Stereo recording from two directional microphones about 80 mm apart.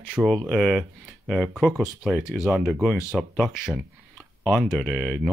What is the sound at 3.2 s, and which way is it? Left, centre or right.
Speech, centre.